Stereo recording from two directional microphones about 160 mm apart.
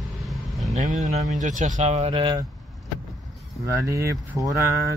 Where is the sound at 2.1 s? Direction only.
25° right (ahead or behind).